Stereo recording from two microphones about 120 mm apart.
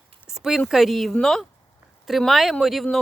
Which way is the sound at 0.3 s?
5° right (ahead or behind).